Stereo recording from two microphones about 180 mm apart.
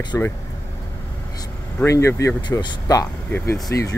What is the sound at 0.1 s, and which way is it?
Speech, 10° left (ahead or behind).